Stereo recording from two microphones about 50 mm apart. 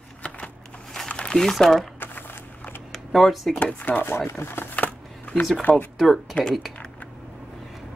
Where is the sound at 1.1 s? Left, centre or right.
Left.